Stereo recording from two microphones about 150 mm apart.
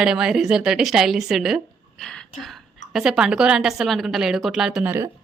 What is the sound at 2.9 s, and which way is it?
Speech, 5° right (ahead or behind).